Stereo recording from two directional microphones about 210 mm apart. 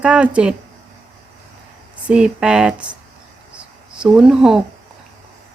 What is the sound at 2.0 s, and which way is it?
Speech, 5° right (ahead or behind).